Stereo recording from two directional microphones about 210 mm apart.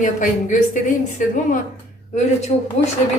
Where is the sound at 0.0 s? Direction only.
35° left (ahead or behind).